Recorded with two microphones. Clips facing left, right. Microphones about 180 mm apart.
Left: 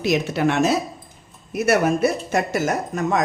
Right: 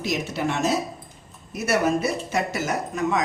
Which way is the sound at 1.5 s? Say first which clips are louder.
Left 4 dB; 55° left (ahead or behind).